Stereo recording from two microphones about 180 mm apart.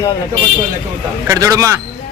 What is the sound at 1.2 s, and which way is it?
Speech, 15° right (ahead or behind).